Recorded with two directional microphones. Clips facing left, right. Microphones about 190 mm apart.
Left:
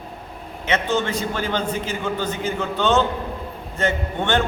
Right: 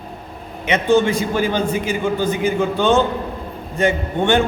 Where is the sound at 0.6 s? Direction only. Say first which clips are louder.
Right 7 dB; 15° right (ahead or behind).